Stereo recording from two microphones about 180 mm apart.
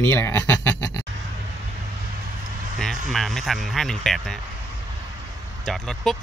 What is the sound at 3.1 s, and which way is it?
Speech, centre (ahead or behind).